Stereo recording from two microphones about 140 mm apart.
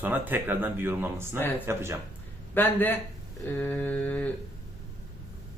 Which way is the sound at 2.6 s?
15° left (ahead or behind).